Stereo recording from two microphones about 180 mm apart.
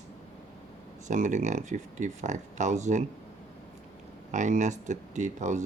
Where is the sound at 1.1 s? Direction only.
45° right (ahead or behind).